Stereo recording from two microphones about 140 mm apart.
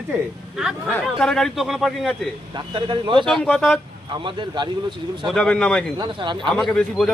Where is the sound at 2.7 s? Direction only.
35° right (ahead or behind).